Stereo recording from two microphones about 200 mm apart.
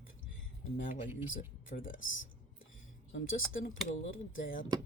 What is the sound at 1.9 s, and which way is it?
Speech, 75° left (ahead or behind).